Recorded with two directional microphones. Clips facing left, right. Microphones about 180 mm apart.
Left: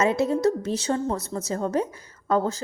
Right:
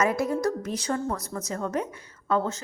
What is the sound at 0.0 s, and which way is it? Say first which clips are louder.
A woman's voice: left 3 dB; 25° left (ahead or behind).